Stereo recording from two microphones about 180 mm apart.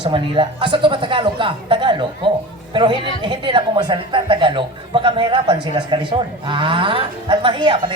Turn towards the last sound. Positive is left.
turn(degrees=-25)  # may be behind; listen again after turning